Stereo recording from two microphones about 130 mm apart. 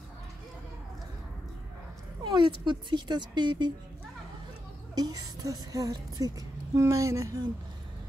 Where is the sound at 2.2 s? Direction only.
35° right (ahead or behind).